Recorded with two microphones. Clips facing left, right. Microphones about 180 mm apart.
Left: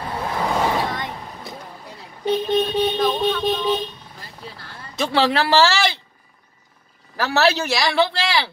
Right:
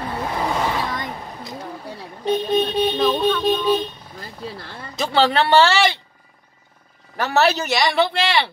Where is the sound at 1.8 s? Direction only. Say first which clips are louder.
Even; 30° right (ahead or behind).